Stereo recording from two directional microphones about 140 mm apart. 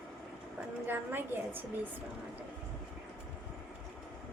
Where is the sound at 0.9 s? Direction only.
15° right (ahead or behind).